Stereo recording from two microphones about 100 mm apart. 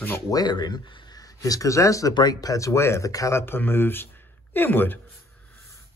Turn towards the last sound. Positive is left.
turn(degrees=20)  # may be behind; listen again after turning